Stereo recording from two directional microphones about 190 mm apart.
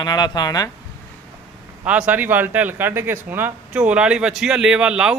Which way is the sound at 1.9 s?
5° right (ahead or behind).